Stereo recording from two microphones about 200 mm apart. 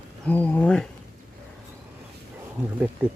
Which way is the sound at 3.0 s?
10° right (ahead or behind).